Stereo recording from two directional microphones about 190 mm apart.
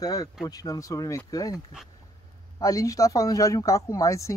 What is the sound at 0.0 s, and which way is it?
Speech, 20° left (ahead or behind).